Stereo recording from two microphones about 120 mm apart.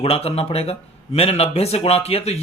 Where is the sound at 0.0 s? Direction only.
55° left (ahead or behind).